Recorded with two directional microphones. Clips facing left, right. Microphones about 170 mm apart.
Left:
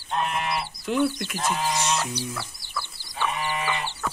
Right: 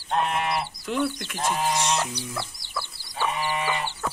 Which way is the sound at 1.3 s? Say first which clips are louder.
Right 1 dB; 30° right (ahead or behind).